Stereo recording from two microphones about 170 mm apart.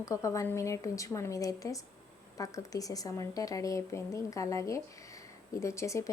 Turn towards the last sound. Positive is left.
turn(degrees=15)  # may be behind; listen again after turning